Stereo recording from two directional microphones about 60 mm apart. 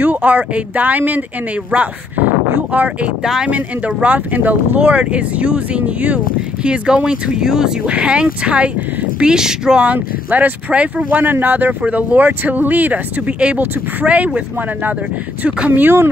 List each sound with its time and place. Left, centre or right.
0.0 s speech: right
9.9 s speech: right